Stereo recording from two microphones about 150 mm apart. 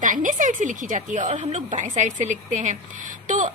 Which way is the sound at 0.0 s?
60° right (ahead or behind).